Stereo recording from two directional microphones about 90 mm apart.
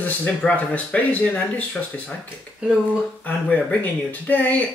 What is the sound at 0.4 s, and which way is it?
Speech, 15° left (ahead or behind).